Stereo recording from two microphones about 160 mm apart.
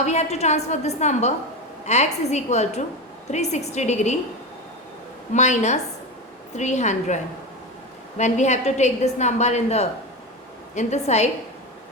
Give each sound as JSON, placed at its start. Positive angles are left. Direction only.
{"t": 0.0, "sound": "a woman's voice", "side_deg": 45}
{"t": 5.3, "sound": "a woman's voice", "side_deg": 45}
{"t": 8.2, "sound": "a woman's voice", "side_deg": 45}